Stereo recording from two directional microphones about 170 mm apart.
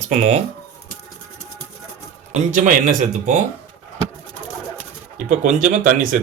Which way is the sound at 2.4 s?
50° right (ahead or behind).